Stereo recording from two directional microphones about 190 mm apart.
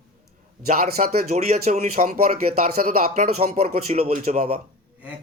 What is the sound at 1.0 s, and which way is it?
A man's voice, 40° right (ahead or behind).